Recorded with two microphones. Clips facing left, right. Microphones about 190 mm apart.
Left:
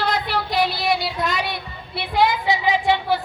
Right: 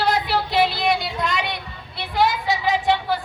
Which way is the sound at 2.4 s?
10° left (ahead or behind).